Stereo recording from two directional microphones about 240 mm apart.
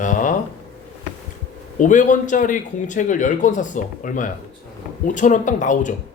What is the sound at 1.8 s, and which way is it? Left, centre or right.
Speech, left.